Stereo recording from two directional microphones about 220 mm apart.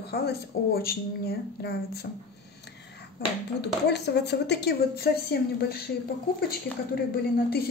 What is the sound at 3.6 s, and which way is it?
A woman's voice, 50° left (ahead or behind).